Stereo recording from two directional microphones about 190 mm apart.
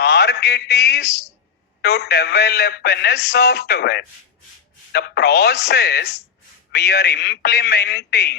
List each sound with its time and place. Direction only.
0.0 s speech: 60° left (ahead or behind)